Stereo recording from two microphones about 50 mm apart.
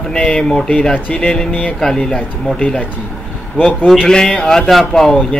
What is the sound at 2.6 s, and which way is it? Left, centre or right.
Speech, left.